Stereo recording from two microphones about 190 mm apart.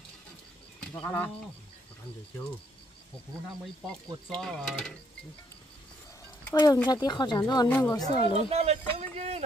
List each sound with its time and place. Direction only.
1.0 s a woman's voice: 10° left (ahead or behind)
4.3 s mechanisms: 5° left (ahead or behind)
6.5 s speech: 20° left (ahead or behind)
7.6 s a woman's voice: 10° left (ahead or behind)
7.9 s speech: 20° left (ahead or behind)
8.5 s a man's voice: 35° right (ahead or behind)